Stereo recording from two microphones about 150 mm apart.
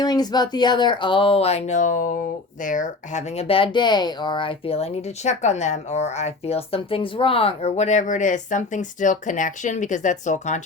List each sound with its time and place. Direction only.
0.0 s speech: 25° left (ahead or behind); by 10.6 s 55° left (ahead or behind)